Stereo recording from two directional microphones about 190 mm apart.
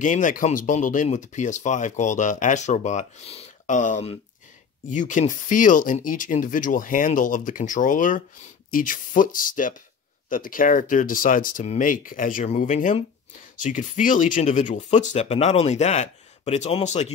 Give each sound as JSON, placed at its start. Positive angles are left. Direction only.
{"t": 0.0, "sound": "speech", "side_deg": 45}